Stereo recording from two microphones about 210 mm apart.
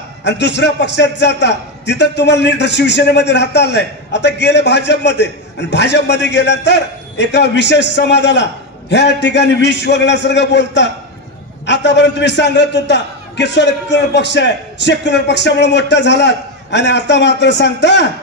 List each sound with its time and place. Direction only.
0.2 s a man's voice: 55° left (ahead or behind)